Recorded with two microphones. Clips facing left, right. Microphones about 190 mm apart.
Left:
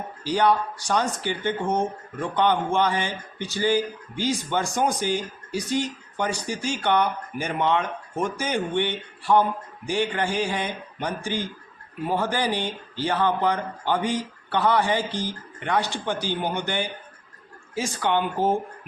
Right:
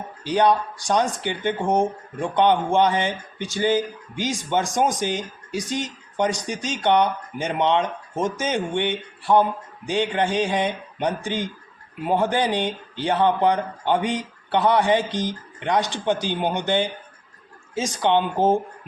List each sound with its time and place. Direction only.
0.3 s speech: 15° right (ahead or behind)